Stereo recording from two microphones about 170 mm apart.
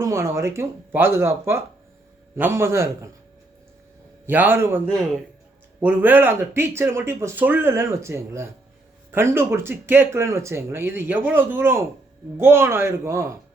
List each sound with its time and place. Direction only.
0.0 s speech: 15° right (ahead or behind)
4.3 s speech: 10° right (ahead or behind)
5.8 s speech: 10° right (ahead or behind)